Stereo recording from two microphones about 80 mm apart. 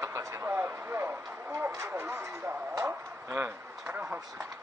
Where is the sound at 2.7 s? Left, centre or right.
Right.